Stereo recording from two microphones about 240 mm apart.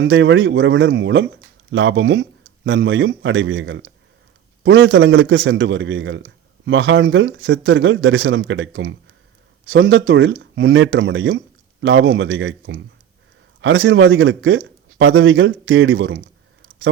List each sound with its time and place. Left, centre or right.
0.0 s a man's voice: right